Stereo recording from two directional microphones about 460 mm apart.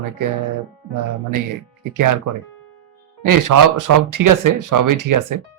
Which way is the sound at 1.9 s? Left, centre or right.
Right.